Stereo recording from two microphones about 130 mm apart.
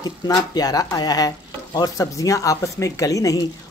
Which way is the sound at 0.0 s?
30° left (ahead or behind).